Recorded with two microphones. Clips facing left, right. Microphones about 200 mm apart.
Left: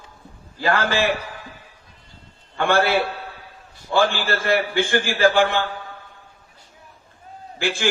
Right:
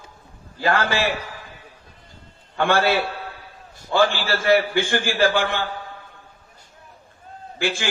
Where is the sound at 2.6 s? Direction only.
55° left (ahead or behind).